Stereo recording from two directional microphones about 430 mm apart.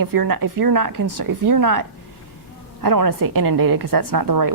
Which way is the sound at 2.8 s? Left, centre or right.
Right.